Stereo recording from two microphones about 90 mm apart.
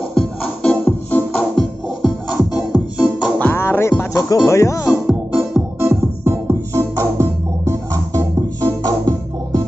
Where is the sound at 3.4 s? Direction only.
25° left (ahead or behind).